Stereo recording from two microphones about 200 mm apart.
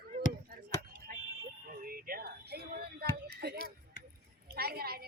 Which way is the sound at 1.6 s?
45° right (ahead or behind).